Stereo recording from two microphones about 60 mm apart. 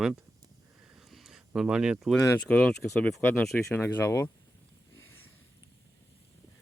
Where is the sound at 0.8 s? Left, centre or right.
Centre.